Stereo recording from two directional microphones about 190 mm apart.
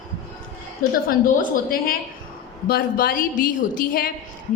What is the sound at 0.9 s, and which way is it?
A woman's voice, 45° left (ahead or behind).